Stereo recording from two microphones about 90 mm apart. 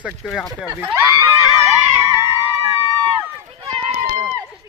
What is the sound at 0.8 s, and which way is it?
Speech, 30° right (ahead or behind).